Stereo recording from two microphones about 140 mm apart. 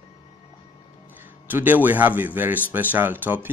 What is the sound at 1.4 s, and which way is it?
A man's voice, 15° right (ahead or behind).